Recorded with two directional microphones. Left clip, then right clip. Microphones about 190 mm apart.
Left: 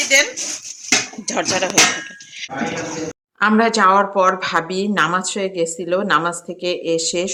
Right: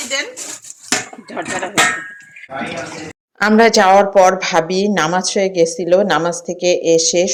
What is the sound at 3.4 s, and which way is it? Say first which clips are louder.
Speech: right 4 dB; 20° right (ahead or behind).